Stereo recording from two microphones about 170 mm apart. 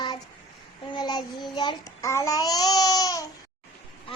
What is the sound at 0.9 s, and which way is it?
Child singing, 25° left (ahead or behind).